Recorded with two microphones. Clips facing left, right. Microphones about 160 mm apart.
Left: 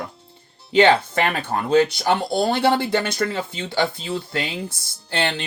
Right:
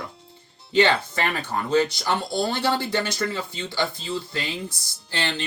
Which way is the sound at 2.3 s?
60° left (ahead or behind).